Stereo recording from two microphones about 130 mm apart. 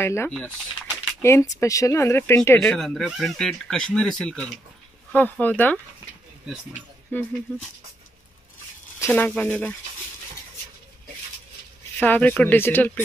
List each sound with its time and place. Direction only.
0.0 s speech: 20° left (ahead or behind)
0.3 s a sound: 5° left (ahead or behind)
1.2 s speech: 20° left (ahead or behind)
7.1 s speech: 10° left (ahead or behind)
9.1 s speech: 10° left (ahead or behind)
12.0 s speech: 10° left (ahead or behind)